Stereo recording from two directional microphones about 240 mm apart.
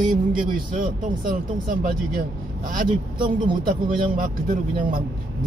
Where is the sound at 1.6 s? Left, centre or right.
Right.